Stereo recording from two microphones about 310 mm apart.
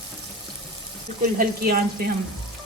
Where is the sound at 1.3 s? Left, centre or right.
Right.